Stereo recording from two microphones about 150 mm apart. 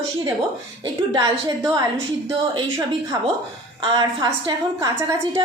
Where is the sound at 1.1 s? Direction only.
30° right (ahead or behind).